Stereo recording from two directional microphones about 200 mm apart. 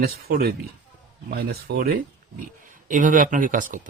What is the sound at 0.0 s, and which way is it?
Speech, 50° right (ahead or behind).